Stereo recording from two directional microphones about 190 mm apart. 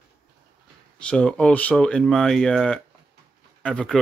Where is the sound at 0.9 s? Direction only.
5° left (ahead or behind).